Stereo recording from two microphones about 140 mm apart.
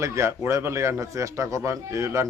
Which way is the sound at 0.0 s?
20° right (ahead or behind).